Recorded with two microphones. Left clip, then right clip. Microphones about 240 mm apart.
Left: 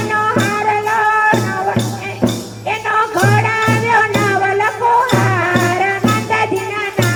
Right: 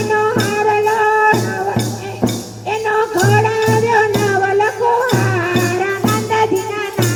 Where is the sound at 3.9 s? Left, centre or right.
Left.